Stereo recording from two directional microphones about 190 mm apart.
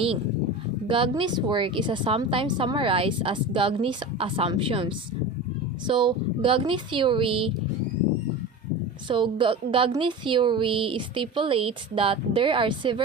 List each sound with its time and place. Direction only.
0.9 s speech: 25° right (ahead or behind)
9.0 s speech: 25° right (ahead or behind)